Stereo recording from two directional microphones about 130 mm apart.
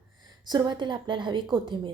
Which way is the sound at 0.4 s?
35° right (ahead or behind).